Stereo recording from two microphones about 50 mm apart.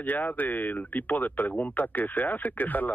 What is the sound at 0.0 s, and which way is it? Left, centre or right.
Speech, left.